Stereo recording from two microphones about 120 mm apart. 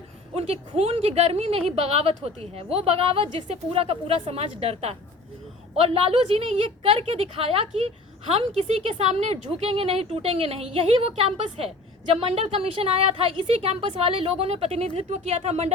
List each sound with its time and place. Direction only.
0.3 s a woman's voice: 60° right (ahead or behind)